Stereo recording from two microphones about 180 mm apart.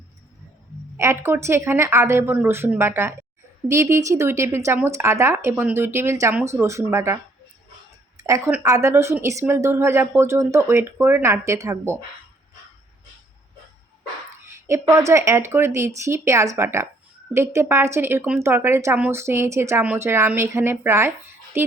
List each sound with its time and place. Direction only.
0.9 s a woman's voice: 15° right (ahead or behind)
8.2 s a woman's voice: 15° right (ahead or behind)
14.7 s a woman's voice: 15° right (ahead or behind)